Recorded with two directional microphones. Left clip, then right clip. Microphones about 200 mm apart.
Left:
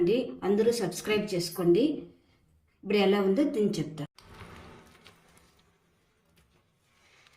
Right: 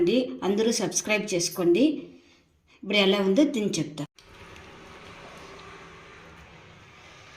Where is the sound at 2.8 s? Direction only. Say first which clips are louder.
Right 3 dB; 30° right (ahead or behind).